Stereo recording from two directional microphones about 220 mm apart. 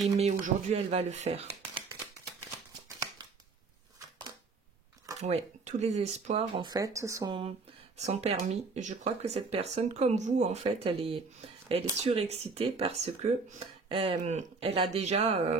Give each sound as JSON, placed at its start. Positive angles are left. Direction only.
{"t": 0.6, "sound": "speech", "side_deg": -30}
{"t": 5.2, "sound": "speech", "side_deg": -30}